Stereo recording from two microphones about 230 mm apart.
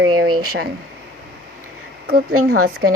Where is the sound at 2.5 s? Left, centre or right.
Right.